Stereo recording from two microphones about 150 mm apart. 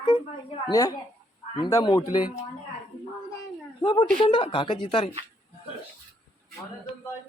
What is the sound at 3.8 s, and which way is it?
Speech, 30° left (ahead or behind).